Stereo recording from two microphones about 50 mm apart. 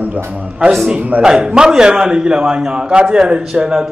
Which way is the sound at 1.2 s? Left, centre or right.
Centre.